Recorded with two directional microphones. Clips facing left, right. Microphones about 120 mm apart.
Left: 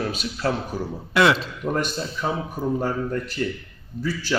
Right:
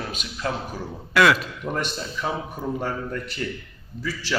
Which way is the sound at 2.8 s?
30° left (ahead or behind).